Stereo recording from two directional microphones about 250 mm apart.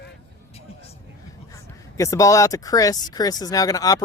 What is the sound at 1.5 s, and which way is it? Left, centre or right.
Speech, centre.